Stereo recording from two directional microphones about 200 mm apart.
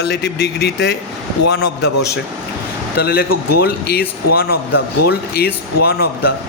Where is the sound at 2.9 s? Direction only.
50° left (ahead or behind).